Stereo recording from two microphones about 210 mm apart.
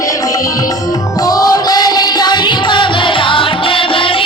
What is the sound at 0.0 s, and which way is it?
Music, 15° left (ahead or behind).